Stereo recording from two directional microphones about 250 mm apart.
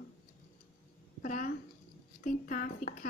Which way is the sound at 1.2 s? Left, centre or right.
Left.